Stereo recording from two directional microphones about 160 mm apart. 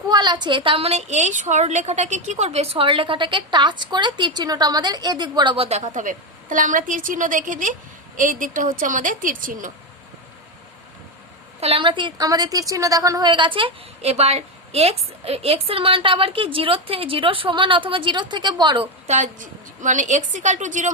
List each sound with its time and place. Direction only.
0.1 s a woman's voice: 25° right (ahead or behind); by 9.7 s 55° right (ahead or behind)
11.6 s a woman's voice: 35° right (ahead or behind)
19.0 s a woman's voice: 50° right (ahead or behind)